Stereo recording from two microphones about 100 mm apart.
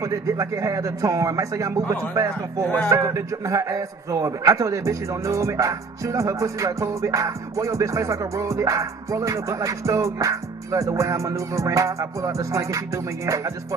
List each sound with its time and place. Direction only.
0.0 s a man's voice: 30° right (ahead or behind)